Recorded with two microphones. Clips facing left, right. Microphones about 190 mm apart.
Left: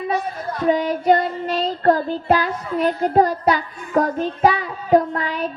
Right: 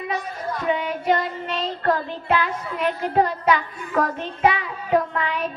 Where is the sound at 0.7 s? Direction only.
35° left (ahead or behind).